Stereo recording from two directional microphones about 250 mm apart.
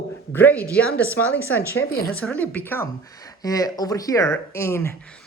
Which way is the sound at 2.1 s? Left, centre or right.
Centre.